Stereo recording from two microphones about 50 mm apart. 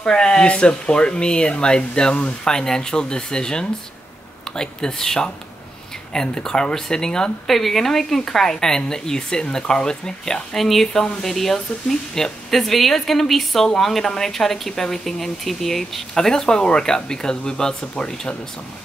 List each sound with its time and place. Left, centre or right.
0.0 s a woman's voice: centre